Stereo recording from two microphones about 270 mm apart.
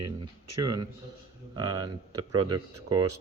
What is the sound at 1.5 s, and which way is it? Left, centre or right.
Speech, centre.